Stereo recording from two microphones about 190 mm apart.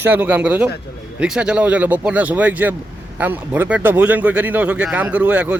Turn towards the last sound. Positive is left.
turn(degrees=-5)  # may be behind; listen again after turning